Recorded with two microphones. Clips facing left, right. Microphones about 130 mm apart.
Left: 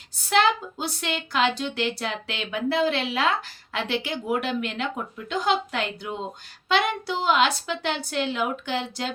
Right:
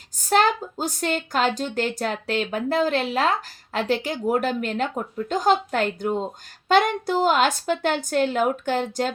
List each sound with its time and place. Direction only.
0.3 s speech: 45° right (ahead or behind)